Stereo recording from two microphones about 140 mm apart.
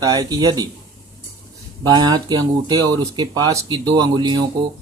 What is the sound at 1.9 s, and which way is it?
Speech, 30° right (ahead or behind).